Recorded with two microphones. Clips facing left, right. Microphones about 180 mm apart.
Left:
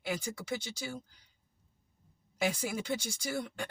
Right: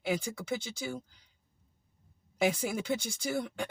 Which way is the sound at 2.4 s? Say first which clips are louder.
Right 3 dB; 55° right (ahead or behind).